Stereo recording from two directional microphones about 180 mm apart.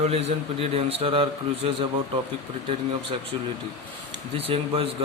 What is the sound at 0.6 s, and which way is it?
Speech, 35° right (ahead or behind).